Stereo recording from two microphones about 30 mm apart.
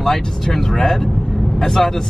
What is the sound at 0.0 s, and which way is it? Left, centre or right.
Speech, centre.